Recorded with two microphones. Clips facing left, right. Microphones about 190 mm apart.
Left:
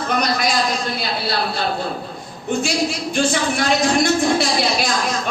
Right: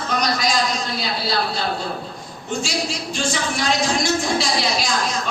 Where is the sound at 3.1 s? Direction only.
55° left (ahead or behind).